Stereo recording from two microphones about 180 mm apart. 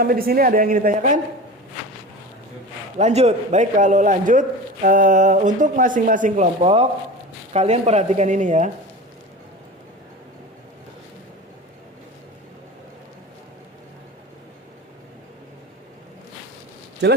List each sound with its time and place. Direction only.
0.0 s a man's voice: 55° right (ahead or behind)
3.0 s a man's voice: 40° right (ahead or behind)